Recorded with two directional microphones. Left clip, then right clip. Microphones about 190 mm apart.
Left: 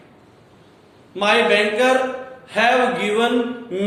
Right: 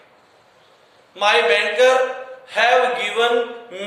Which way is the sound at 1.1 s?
5° left (ahead or behind).